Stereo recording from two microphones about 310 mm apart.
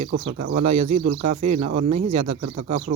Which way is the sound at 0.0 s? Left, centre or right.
Right.